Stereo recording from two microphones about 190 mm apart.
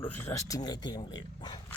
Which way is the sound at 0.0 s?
10° left (ahead or behind).